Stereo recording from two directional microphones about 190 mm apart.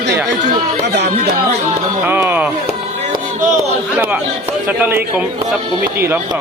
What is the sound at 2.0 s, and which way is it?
Music, 10° right (ahead or behind).